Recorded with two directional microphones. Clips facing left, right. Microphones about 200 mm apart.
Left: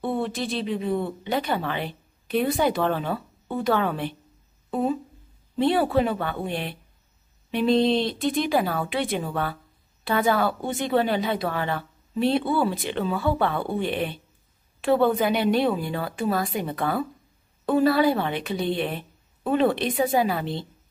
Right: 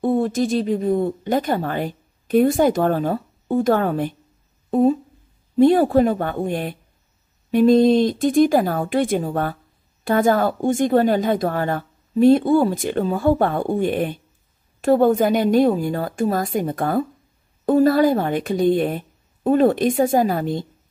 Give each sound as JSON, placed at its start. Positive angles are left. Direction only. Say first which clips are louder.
{"t": 0.0, "sound": "a woman's voice", "louder": "right 8 dB", "side_deg": -45}